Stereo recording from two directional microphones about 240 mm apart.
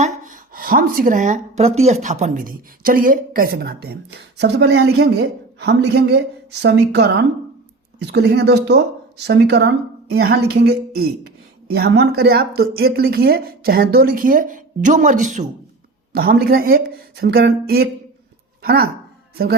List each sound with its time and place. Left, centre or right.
0.0 s speech: right